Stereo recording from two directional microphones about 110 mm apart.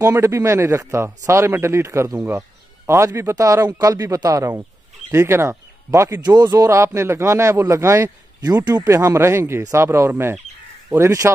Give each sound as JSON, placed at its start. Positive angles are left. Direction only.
{"t": 0.0, "sound": "a man's voice", "side_deg": -25}
{"t": 6.2, "sound": "a man's voice", "side_deg": -40}
{"t": 8.9, "sound": "a man's voice", "side_deg": -25}